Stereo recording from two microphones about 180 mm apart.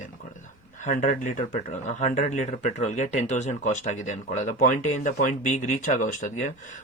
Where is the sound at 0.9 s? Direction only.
40° left (ahead or behind).